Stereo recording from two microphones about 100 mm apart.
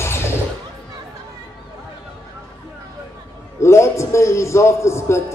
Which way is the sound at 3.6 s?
30° left (ahead or behind).